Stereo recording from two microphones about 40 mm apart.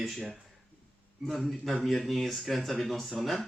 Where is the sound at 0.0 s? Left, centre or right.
Centre.